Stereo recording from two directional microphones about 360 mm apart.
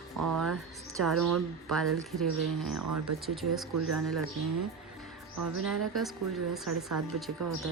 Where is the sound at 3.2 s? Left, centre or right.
Centre.